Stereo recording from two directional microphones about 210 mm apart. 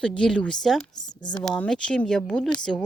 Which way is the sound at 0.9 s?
20° left (ahead or behind).